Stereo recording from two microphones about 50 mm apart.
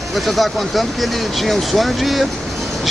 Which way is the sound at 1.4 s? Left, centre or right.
Centre.